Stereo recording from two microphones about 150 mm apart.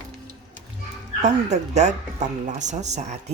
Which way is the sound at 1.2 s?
50° right (ahead or behind).